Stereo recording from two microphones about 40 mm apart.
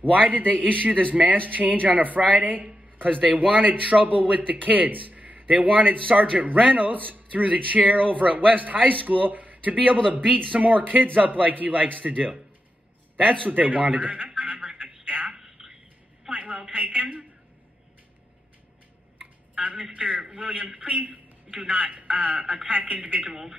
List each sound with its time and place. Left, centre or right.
0.1 s a man's voice: right
10.2 s speech: centre
10.5 s a man's voice: right
13.5 s a man's voice: right
15.0 s telephone: right
15.3 s a sound: centre
16.3 s a sound: right
16.7 s a man's voice: right
19.5 s a man's voice: right